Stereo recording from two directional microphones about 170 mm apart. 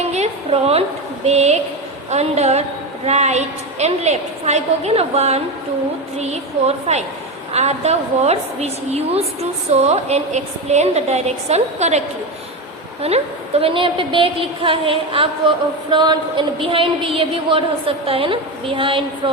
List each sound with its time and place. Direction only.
0.1 s a woman's voice: 40° right (ahead or behind)